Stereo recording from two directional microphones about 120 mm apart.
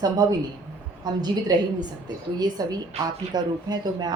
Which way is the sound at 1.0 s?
35° right (ahead or behind).